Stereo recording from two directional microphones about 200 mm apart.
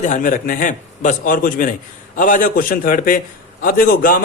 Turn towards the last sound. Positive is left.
turn(degrees=45)  # may be behind; listen again after turning